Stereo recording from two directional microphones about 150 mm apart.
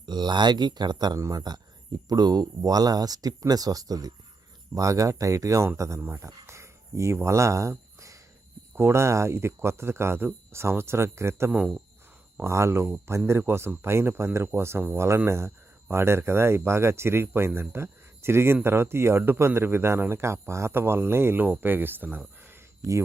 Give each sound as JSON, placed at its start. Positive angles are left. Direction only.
{"t": 0.0, "sound": "speech", "side_deg": -30}